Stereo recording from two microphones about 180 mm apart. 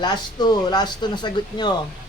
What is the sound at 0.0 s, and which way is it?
A woman's voice, 25° left (ahead or behind).